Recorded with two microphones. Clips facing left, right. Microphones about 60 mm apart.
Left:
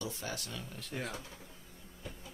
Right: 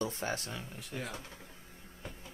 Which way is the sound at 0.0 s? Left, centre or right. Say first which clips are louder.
Right 5 dB; right.